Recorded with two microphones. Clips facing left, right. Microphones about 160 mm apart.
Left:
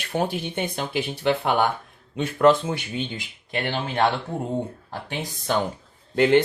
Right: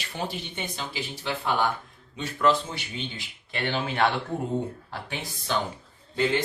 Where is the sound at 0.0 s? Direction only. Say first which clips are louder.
Left 8 dB; 55° left (ahead or behind).